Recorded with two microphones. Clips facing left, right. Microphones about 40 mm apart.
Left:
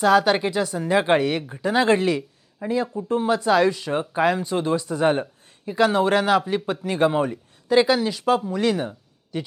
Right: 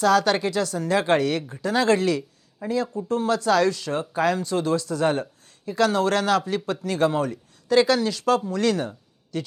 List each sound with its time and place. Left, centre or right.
0.0 s speech: centre